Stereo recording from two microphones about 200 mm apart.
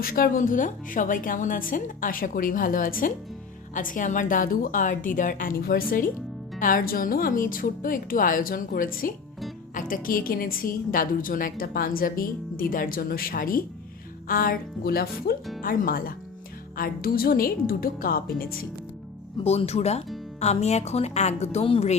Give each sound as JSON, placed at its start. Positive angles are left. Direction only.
{"t": 0.0, "sound": "a woman's voice", "side_deg": 45}
{"t": 19.5, "sound": "a woman's voice", "side_deg": 30}